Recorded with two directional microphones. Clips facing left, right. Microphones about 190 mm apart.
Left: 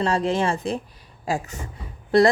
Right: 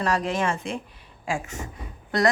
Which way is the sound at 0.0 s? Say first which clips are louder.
Left 3 dB; 30° left (ahead or behind).